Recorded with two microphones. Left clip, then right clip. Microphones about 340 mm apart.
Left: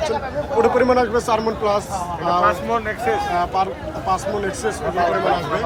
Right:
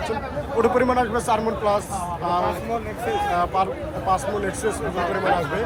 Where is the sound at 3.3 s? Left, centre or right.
Centre.